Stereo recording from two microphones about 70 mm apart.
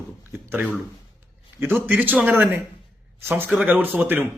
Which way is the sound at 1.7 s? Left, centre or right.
Right.